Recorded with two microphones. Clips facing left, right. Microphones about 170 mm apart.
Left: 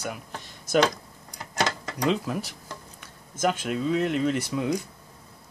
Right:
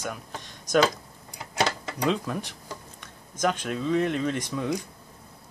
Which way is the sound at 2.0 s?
5° left (ahead or behind).